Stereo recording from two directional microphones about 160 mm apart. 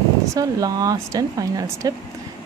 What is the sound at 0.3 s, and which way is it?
Speech, 20° right (ahead or behind).